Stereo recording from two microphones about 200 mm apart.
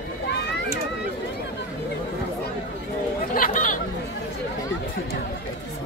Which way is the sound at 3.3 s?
45° left (ahead or behind).